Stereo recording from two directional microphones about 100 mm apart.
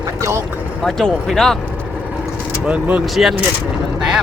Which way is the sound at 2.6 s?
15° right (ahead or behind).